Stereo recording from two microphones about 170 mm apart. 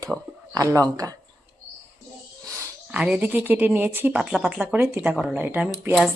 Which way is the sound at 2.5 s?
15° right (ahead or behind).